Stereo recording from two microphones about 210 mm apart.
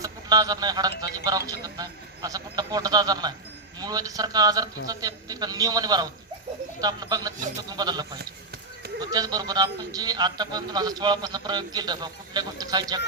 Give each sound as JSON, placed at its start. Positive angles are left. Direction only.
{"t": 0.0, "sound": "speech", "side_deg": -15}